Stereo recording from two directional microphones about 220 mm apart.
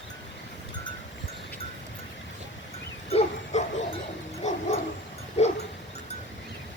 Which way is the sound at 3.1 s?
25° left (ahead or behind).